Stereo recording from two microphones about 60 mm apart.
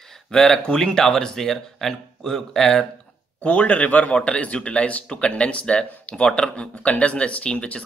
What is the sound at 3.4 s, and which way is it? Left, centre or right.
A man's voice, left.